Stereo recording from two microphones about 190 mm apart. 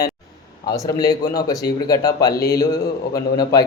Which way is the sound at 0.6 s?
20° left (ahead or behind).